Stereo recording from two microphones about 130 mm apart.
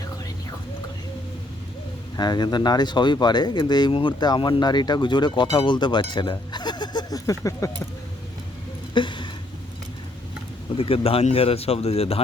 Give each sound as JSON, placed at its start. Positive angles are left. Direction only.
{"t": 2.1, "sound": "speech", "side_deg": 35}
{"t": 9.0, "sound": "a sound", "side_deg": 40}
{"t": 10.8, "sound": "speech", "side_deg": 45}